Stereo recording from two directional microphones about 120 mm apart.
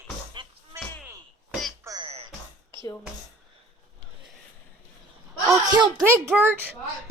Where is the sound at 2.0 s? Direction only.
50° right (ahead or behind).